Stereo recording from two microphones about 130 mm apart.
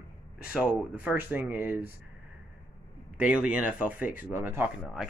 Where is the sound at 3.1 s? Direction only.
10° right (ahead or behind).